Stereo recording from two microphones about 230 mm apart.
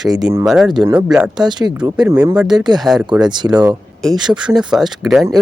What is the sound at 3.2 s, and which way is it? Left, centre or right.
Speech, centre.